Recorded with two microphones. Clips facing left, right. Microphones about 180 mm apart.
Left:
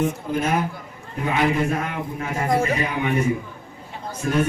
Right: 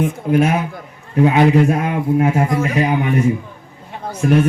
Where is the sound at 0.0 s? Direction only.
70° right (ahead or behind).